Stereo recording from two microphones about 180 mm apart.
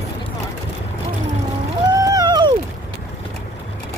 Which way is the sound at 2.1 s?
20° right (ahead or behind).